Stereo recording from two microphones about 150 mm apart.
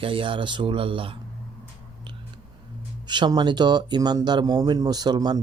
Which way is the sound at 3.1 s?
30° right (ahead or behind).